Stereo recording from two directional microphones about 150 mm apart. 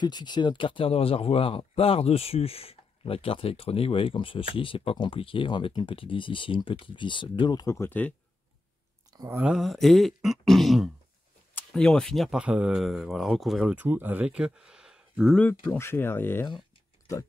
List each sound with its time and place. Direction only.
0.0 s speech: 30° left (ahead or behind); by 8.1 s 15° left (ahead or behind)
9.4 s speech: 5° right (ahead or behind)
15.3 s speech: 10° left (ahead or behind)